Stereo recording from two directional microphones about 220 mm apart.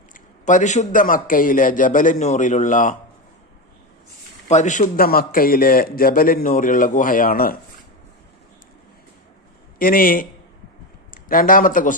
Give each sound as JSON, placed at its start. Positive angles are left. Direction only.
{"t": 0.1, "sound": "a man's voice", "side_deg": 35}
{"t": 4.4, "sound": "a man's voice", "side_deg": 35}
{"t": 9.7, "sound": "a man's voice", "side_deg": 40}